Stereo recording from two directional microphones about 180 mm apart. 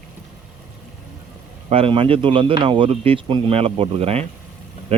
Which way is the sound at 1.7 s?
30° right (ahead or behind).